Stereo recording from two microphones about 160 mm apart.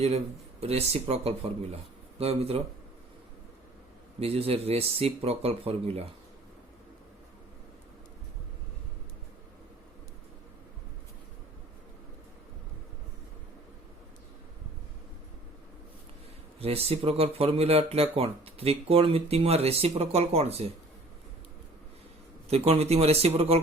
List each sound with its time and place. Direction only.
0.6 s speech: 40° right (ahead or behind)
4.2 s speech: 40° right (ahead or behind)
16.6 s speech: 40° right (ahead or behind)
22.4 s speech: 40° right (ahead or behind)